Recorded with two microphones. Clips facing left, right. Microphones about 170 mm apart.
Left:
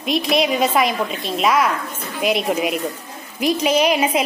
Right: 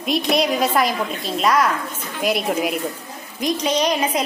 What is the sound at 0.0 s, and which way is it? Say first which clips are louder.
A woman's voice: left 1 dB; centre (ahead or behind).